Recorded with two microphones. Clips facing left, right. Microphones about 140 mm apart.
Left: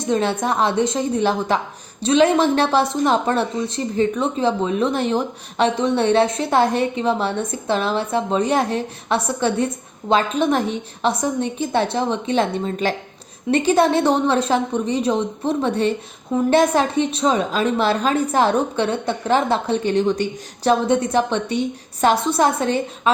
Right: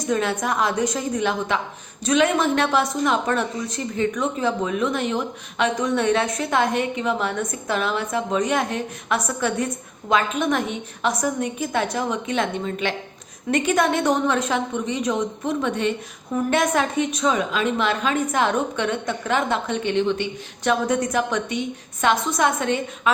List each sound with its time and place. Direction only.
0.0 s a woman's voice: 30° left (ahead or behind)
20.8 s a woman's voice: 30° left (ahead or behind)